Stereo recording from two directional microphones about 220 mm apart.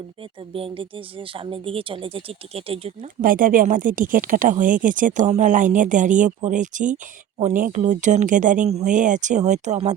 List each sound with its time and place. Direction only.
0.5 s speech: 25° right (ahead or behind)
3.2 s speech: 40° right (ahead or behind)